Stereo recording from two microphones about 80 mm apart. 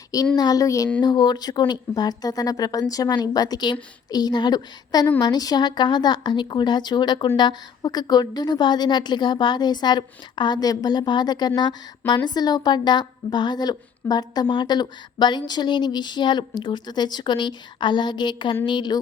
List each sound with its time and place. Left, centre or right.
0.3 s speech: left
1.0 s speech: left